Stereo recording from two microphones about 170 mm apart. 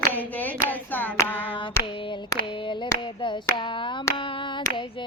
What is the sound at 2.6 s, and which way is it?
Clapping, 30° left (ahead or behind).